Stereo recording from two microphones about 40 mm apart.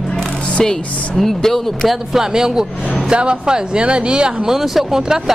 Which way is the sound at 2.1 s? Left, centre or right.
Centre.